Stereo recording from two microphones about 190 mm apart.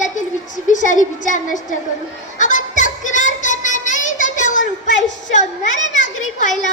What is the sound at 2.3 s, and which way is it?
Music, 40° left (ahead or behind).